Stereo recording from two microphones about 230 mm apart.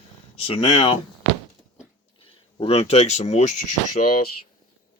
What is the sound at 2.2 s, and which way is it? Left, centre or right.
Speech, left.